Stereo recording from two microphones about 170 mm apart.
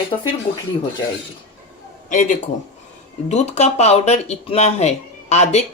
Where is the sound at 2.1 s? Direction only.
50° left (ahead or behind).